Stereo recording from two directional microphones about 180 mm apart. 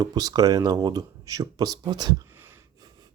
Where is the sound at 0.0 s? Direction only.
20° right (ahead or behind).